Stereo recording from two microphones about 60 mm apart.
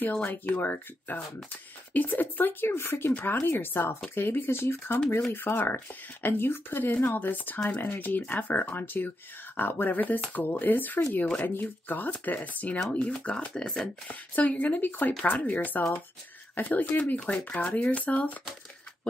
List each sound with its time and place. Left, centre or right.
0.0 s speech: left; by 13.8 s centre
14.0 s speech: left